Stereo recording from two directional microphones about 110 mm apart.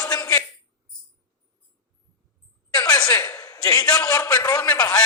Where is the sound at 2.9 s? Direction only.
30° left (ahead or behind).